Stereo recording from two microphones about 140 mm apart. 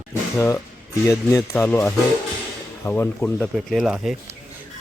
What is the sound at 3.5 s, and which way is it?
Speech, centre (ahead or behind).